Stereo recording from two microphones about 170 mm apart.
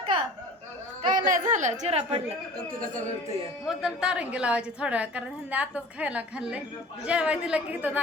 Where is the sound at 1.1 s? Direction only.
50° right (ahead or behind).